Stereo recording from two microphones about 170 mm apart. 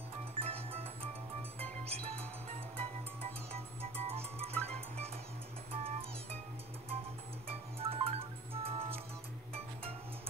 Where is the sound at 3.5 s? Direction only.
35° right (ahead or behind).